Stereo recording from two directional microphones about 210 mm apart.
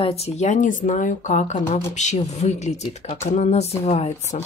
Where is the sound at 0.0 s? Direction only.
30° left (ahead or behind).